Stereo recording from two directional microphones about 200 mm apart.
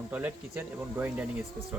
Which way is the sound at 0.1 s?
10° right (ahead or behind).